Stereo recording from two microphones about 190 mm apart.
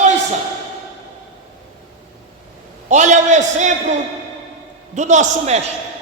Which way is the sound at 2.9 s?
40° right (ahead or behind).